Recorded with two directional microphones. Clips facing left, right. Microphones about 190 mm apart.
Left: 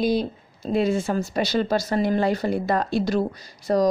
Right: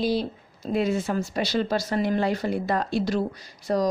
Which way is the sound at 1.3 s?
45° left (ahead or behind).